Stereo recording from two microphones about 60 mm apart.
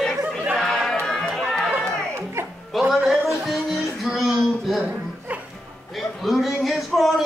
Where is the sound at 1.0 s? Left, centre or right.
Centre.